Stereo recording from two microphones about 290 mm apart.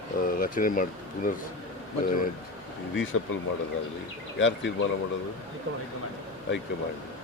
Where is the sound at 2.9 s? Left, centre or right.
Left.